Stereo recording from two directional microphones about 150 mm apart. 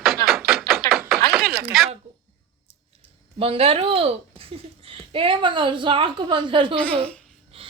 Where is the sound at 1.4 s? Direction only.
90° right.